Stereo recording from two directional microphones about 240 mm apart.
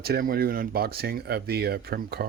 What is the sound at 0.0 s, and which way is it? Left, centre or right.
Speech, right.